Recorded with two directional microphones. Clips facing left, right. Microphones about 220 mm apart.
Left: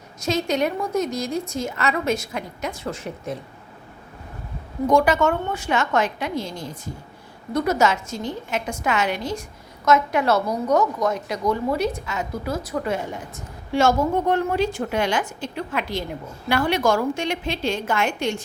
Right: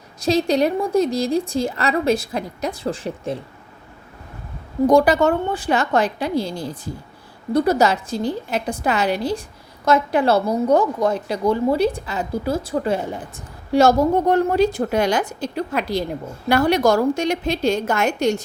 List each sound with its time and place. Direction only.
0.2 s a woman's voice: 35° right (ahead or behind)
4.9 s a woman's voice: 35° right (ahead or behind)